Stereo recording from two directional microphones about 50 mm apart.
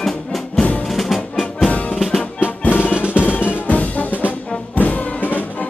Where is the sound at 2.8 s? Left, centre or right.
Right.